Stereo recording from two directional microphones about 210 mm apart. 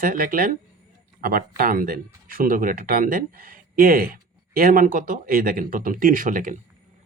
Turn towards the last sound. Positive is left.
turn(degrees=-40)  # may be behind; listen again after turning